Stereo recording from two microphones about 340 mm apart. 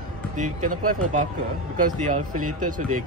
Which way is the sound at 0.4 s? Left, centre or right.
Right.